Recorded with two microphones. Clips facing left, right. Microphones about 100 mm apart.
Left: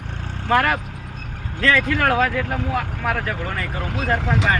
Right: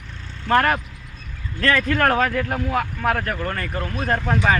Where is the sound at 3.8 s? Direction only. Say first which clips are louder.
Left 1 dB; 90° left.